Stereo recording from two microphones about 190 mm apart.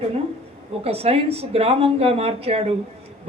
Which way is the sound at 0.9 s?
30° right (ahead or behind).